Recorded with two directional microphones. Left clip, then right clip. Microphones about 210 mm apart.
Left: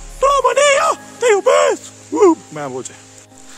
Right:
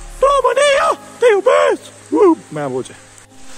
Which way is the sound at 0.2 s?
5° left (ahead or behind).